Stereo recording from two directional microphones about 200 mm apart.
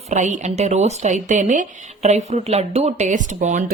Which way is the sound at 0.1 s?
35° right (ahead or behind).